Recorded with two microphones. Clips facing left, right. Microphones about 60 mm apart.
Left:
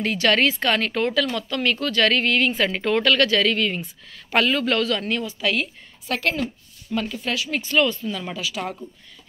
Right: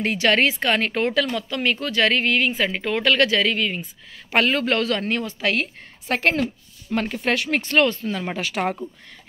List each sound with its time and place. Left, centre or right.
0.0 s speech: right
3.0 s speech: right
4.3 s a woman's voice: right
7.0 s speech: right
7.7 s speech: right
8.4 s speech: right